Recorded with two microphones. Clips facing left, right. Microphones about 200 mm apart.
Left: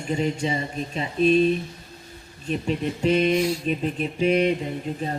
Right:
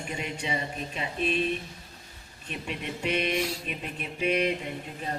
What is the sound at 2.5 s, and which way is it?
Speech, 35° left (ahead or behind).